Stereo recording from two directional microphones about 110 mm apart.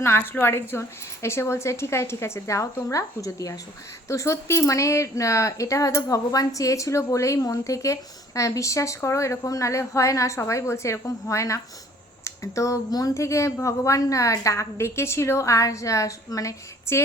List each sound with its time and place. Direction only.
0.0 s speech: 20° left (ahead or behind)